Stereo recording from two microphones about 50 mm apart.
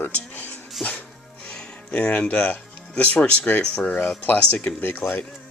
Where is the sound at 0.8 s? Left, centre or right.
Centre.